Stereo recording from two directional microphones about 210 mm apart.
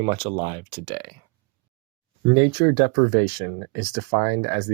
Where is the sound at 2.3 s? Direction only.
20° right (ahead or behind).